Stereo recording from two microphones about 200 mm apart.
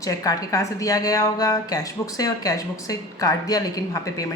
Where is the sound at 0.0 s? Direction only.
15° left (ahead or behind).